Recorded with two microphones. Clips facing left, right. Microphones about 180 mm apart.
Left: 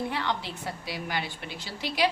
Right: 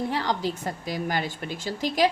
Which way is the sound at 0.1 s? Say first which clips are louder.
Right 5 dB; 40° right (ahead or behind).